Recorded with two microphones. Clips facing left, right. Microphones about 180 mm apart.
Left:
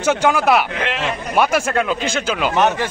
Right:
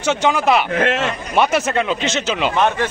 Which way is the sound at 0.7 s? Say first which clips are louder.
Right 6 dB; 45° right (ahead or behind).